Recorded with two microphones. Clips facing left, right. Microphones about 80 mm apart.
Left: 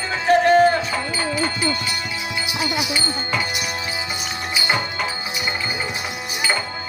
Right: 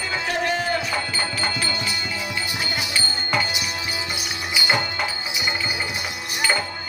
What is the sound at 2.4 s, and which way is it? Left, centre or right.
Music, left.